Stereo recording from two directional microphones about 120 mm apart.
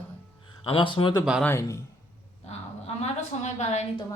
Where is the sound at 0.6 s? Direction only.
45° left (ahead or behind).